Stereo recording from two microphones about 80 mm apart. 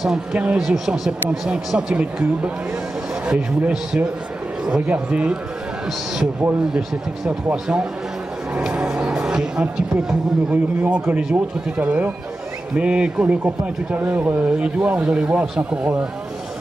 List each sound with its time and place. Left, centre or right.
0.0 s speech: centre
7.5 s speech: centre